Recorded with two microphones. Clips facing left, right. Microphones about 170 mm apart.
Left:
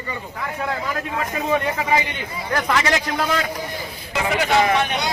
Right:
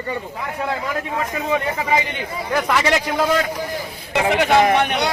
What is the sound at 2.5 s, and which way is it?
Speech, 5° right (ahead or behind).